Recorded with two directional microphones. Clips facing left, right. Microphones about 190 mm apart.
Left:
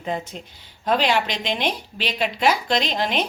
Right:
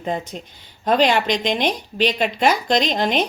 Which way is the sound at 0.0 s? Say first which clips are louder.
Right 2 dB; 40° right (ahead or behind).